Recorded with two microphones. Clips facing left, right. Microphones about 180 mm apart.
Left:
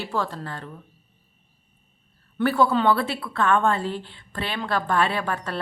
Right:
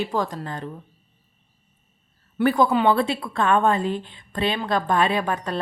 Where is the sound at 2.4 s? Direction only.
15° right (ahead or behind).